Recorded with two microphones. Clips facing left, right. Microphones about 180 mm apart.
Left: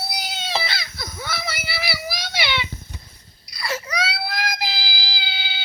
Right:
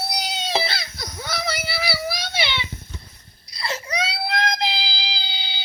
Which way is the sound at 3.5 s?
25° right (ahead or behind).